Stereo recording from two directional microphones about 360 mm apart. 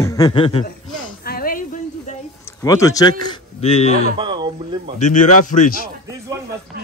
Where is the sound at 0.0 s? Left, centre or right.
Centre.